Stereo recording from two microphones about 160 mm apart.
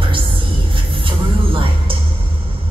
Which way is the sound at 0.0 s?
35° right (ahead or behind).